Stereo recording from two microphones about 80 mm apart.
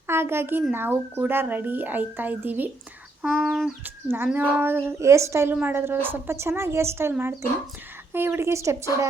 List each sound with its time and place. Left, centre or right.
0.1 s a child's voice: right
3.2 s speech: centre
4.4 s speech: right